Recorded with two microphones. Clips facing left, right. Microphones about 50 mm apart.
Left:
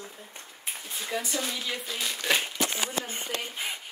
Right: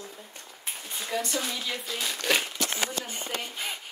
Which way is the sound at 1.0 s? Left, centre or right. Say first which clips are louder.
Right 1 dB; centre.